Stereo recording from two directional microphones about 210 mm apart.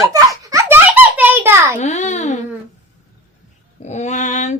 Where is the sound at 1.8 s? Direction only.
35° left (ahead or behind).